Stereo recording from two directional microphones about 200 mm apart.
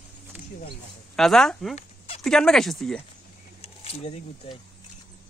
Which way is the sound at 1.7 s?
30° left (ahead or behind).